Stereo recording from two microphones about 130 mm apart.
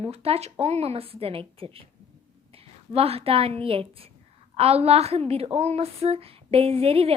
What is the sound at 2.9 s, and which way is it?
Speech, 50° right (ahead or behind).